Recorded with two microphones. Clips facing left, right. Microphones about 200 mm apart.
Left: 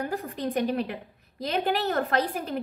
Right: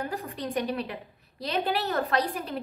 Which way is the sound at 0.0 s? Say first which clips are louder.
Left 3 dB; 50° left (ahead or behind).